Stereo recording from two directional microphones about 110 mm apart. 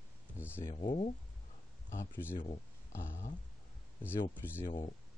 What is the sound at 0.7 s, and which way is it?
Speech, 75° left (ahead or behind).